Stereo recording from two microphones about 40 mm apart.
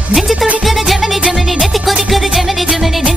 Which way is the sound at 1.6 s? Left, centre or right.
Centre.